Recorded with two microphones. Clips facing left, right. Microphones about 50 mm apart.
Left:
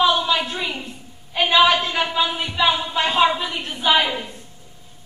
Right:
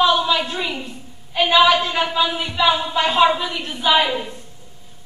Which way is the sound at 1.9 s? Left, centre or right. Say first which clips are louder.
Right 2 dB; right.